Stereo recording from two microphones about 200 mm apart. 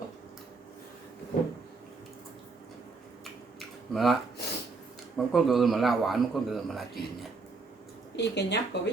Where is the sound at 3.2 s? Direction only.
Centre (ahead or behind).